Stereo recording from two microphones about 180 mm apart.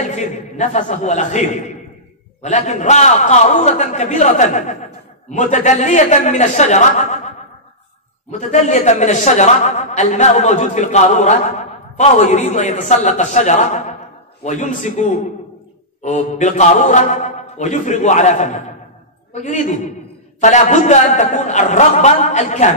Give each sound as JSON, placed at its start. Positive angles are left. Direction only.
{"t": 0.0, "sound": "a man's voice", "side_deg": 40}